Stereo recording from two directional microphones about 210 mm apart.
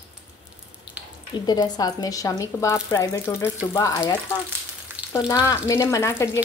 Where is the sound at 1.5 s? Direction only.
20° left (ahead or behind).